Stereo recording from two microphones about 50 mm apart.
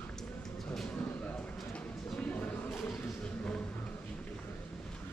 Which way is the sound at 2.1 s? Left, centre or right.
Left.